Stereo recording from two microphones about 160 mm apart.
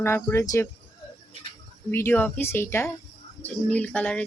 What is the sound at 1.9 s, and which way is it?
A woman's voice, 15° left (ahead or behind).